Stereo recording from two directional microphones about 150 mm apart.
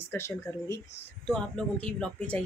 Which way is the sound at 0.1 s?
20° left (ahead or behind).